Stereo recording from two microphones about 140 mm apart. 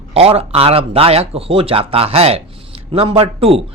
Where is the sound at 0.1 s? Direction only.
45° right (ahead or behind).